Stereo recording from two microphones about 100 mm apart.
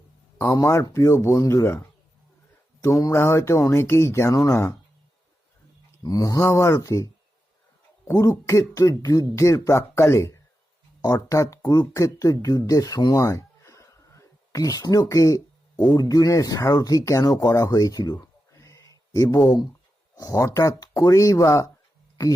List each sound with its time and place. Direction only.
0.5 s speech: 30° left (ahead or behind)
2.8 s speech: 30° left (ahead or behind)
6.0 s mantra: 40° left (ahead or behind)
6.5 s speech: 30° left (ahead or behind)
13.2 s a sound: 30° left (ahead or behind)
16.0 s speech: 35° left (ahead or behind)